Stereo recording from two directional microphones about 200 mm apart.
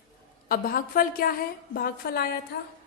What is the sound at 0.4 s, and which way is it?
A woman's voice, 45° left (ahead or behind).